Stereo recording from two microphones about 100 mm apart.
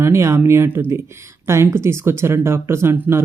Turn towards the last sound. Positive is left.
turn(degrees=-25)  # may be behind; listen again after turning